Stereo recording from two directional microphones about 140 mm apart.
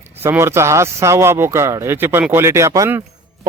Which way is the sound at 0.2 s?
20° right (ahead or behind).